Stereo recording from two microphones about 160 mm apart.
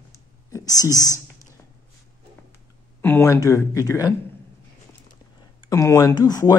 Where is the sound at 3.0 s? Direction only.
15° left (ahead or behind).